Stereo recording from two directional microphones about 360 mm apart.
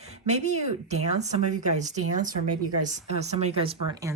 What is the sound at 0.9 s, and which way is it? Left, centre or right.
Speech, centre.